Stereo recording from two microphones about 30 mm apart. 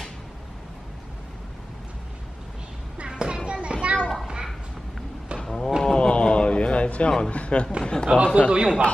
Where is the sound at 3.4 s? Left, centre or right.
Right.